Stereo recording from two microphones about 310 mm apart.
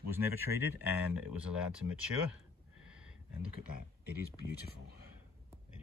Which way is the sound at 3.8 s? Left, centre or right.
Left.